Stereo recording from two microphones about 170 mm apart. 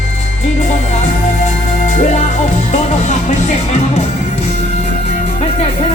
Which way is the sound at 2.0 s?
40° left (ahead or behind).